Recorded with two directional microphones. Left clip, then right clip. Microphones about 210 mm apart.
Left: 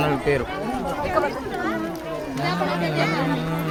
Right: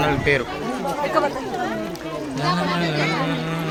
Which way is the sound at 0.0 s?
Centre (ahead or behind).